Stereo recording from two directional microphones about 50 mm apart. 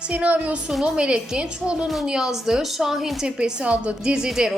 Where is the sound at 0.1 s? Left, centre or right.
Right.